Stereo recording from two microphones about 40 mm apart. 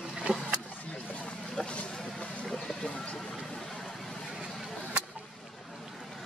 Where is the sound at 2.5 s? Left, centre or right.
Centre.